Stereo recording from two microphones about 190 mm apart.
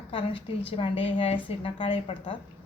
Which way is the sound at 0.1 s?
30° left (ahead or behind).